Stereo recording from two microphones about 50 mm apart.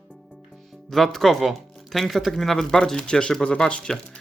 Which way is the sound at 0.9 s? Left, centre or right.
Centre.